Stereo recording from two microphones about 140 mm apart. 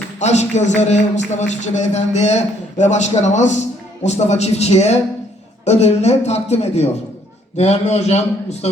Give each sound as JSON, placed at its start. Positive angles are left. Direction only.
{"t": 0.2, "sound": "a man's voice", "side_deg": 55}